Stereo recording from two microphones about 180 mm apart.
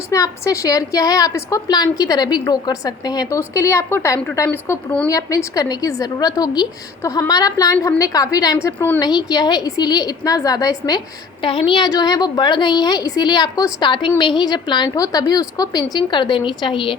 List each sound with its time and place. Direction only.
0.1 s a woman's voice: 15° left (ahead or behind)